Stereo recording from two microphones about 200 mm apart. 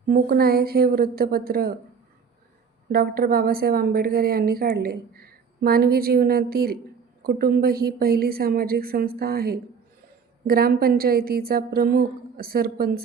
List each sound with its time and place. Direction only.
0.1 s speech: 50° right (ahead or behind)
2.9 s speech: 50° right (ahead or behind)